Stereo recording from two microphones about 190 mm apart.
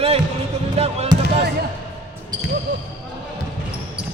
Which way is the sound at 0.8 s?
35° right (ahead or behind).